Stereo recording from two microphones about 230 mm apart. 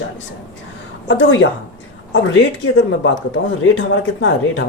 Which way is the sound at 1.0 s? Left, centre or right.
Left.